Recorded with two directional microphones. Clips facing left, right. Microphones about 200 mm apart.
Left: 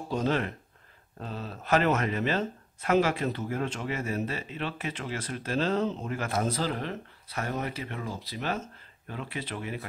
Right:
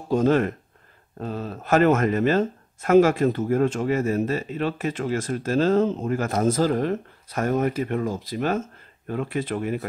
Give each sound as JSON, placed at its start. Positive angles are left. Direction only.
{"t": 0.1, "sound": "speech", "side_deg": -50}